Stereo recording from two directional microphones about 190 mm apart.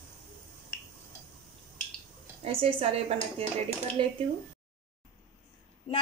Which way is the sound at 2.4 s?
30° right (ahead or behind).